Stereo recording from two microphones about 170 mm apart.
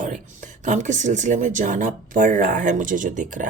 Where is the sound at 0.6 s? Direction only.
45° right (ahead or behind).